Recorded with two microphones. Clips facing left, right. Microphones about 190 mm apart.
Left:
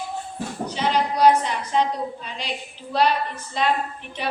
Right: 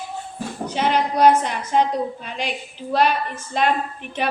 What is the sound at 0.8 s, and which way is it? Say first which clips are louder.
A woman's voice: right 2 dB; 55° right (ahead or behind).